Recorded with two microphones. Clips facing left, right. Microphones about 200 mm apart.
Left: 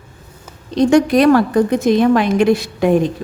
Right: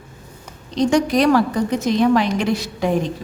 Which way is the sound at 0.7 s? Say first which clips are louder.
Left 5 dB; 55° left (ahead or behind).